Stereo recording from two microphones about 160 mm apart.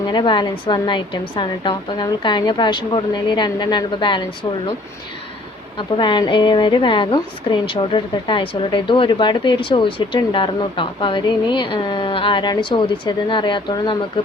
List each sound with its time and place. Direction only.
0.1 s a woman's voice: 30° left (ahead or behind)
5.7 s a woman's voice: 30° left (ahead or behind)